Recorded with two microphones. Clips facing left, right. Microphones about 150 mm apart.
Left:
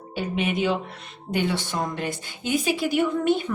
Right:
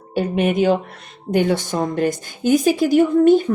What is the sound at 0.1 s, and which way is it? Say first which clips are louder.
Speech: right 7 dB; 45° right (ahead or behind).